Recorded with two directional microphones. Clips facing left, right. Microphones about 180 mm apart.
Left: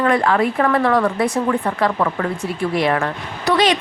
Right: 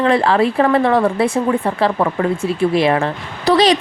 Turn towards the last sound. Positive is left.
turn(degrees=-35)  # may be behind; listen again after turning